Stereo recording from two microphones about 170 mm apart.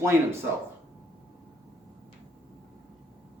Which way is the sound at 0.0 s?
15° right (ahead or behind).